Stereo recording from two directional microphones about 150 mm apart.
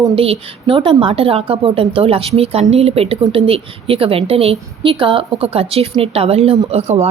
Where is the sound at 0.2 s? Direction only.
35° right (ahead or behind).